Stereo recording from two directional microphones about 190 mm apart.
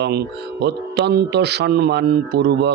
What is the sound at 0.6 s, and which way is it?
Speech, 60° right (ahead or behind).